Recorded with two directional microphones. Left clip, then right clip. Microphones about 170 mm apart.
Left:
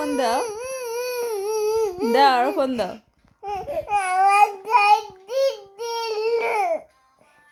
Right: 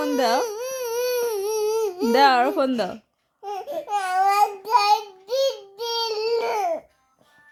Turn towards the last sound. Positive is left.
turn(degrees=-15)  # may be behind; listen again after turning